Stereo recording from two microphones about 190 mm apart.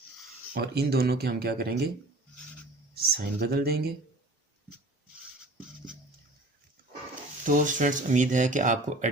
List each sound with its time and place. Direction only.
0.5 s speech: 55° right (ahead or behind)
2.9 s speech: 55° right (ahead or behind)
7.4 s speech: 45° right (ahead or behind)